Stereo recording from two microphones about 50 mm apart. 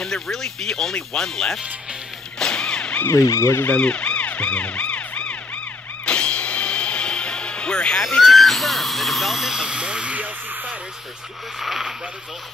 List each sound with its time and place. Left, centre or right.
0.0 s speech: centre
2.3 s a sound: centre
3.1 s speech: left
3.7 s emergency vehicle: left
6.0 s music: left
8.3 s speech: centre; by 10.8 s right
11.6 s speech: centre